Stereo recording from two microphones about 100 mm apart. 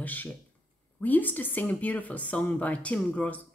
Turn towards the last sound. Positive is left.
turn(degrees=15)  # may be behind; listen again after turning